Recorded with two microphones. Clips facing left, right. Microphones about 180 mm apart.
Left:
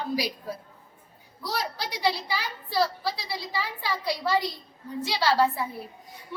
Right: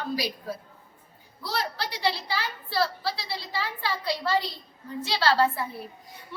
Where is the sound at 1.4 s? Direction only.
15° left (ahead or behind).